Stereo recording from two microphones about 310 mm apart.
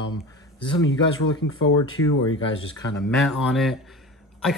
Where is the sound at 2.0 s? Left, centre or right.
Left.